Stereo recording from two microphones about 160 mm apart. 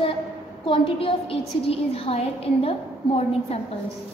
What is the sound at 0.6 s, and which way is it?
A woman's voice, 35° left (ahead or behind).